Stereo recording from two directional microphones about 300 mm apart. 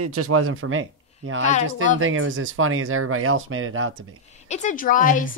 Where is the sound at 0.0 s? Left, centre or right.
Right.